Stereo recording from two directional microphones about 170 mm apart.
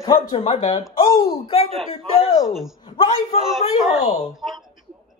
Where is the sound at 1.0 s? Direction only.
20° left (ahead or behind).